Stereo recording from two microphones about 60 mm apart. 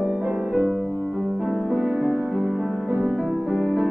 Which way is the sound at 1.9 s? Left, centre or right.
Centre.